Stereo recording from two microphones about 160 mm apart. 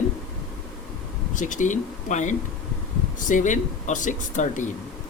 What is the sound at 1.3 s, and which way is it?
Speech, 50° left (ahead or behind).